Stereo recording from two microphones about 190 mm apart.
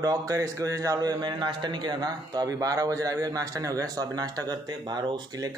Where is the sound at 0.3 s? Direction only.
15° right (ahead or behind).